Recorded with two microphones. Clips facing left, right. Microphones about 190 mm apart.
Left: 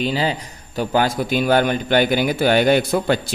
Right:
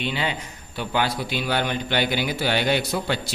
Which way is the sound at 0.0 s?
35° left (ahead or behind).